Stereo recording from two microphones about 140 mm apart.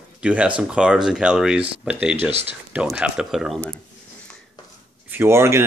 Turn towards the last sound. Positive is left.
turn(degrees=-20)  # may be behind; listen again after turning